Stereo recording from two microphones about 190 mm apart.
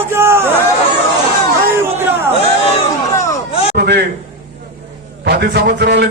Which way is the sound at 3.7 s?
60° right (ahead or behind).